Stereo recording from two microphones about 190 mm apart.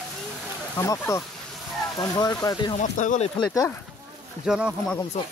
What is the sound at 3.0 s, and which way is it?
Speech, 40° left (ahead or behind).